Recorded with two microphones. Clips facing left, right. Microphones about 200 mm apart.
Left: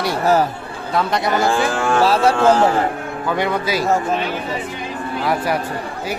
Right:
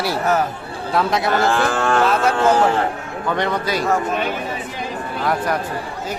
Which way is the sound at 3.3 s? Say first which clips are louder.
Left 1 dB; 5° left (ahead or behind).